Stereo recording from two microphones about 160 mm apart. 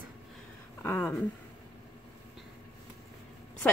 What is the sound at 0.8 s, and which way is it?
Speech, 15° left (ahead or behind).